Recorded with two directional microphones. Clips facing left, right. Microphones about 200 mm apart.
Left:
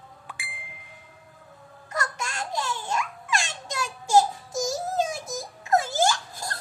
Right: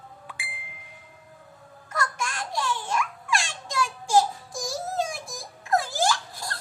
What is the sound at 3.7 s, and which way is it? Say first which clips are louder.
Child singing: even; 20° left (ahead or behind).